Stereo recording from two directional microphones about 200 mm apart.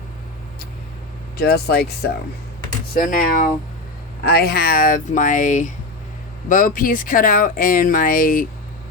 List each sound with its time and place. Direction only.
1.4 s speech: 50° left (ahead or behind)
2.9 s speech: 40° left (ahead or behind)
4.2 s speech: 50° left (ahead or behind)